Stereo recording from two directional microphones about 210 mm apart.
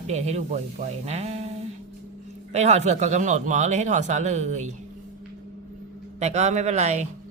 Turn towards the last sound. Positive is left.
turn(degrees=-30)  # may be behind; listen again after turning